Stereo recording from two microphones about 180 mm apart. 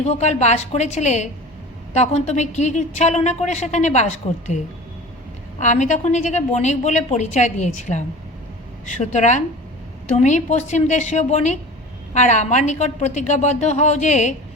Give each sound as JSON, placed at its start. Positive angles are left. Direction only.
{"t": 0.0, "sound": "a woman's voice", "side_deg": 40}